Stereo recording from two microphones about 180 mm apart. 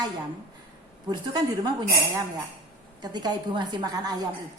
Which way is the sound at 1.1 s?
25° right (ahead or behind).